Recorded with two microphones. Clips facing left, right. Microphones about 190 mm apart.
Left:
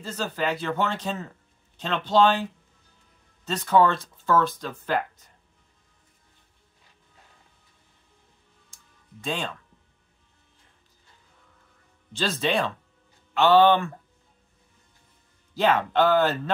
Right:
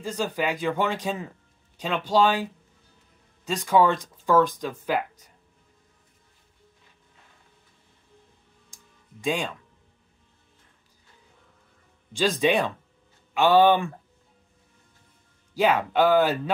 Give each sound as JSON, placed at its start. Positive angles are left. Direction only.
{"t": 0.0, "sound": "speech", "side_deg": -15}
{"t": 3.4, "sound": "speech", "side_deg": -10}
{"t": 8.6, "sound": "music", "side_deg": -10}
{"t": 12.1, "sound": "speech", "side_deg": -10}
{"t": 15.5, "sound": "speech", "side_deg": -10}